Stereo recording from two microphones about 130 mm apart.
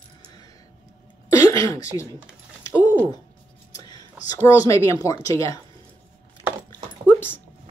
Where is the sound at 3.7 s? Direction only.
30° left (ahead or behind).